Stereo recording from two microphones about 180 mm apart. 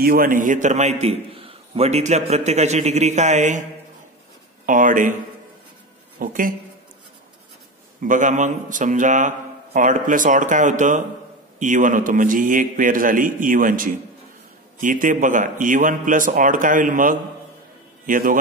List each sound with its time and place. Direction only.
0.0 s a man's voice: 55° right (ahead or behind)
4.6 s speech: 45° right (ahead or behind)
6.1 s a woman's voice: 50° right (ahead or behind)
8.0 s speech: 45° right (ahead or behind)